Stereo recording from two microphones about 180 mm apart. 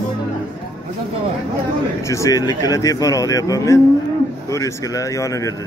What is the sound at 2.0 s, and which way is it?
Speech, 15° left (ahead or behind).